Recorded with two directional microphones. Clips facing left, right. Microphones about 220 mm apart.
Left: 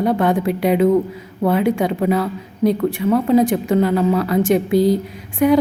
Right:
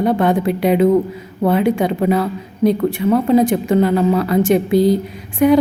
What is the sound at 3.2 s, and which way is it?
A woman's voice, 5° left (ahead or behind).